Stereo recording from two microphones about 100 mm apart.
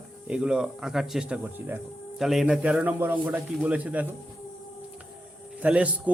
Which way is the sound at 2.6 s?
15° right (ahead or behind).